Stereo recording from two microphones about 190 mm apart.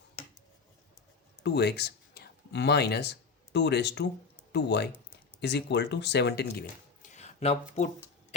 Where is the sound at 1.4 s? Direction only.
60° left (ahead or behind).